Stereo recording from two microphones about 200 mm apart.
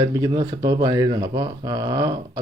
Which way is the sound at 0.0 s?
20° right (ahead or behind).